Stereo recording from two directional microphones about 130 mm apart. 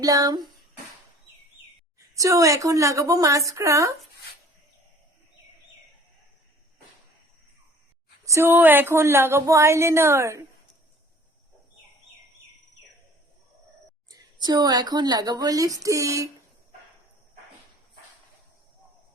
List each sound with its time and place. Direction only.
0.0 s speech: 30° right (ahead or behind)
2.1 s speech: 25° right (ahead or behind)
8.2 s speech: 20° right (ahead or behind)
14.1 s speech: 30° right (ahead or behind)